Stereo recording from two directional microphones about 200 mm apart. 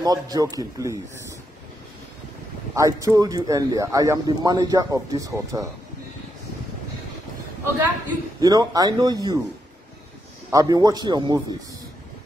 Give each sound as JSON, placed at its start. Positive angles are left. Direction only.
{"t": 0.0, "sound": "speech", "side_deg": -20}
{"t": 2.7, "sound": "speech", "side_deg": -15}
{"t": 8.4, "sound": "speech", "side_deg": -20}
{"t": 10.5, "sound": "speech", "side_deg": -20}